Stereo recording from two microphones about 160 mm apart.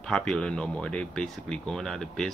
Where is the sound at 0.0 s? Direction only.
5° left (ahead or behind).